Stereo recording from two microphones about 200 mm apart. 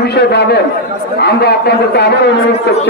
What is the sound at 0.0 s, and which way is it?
A man's voice, 55° left (ahead or behind).